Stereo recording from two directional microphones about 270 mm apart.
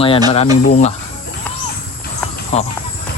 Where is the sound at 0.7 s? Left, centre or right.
Left.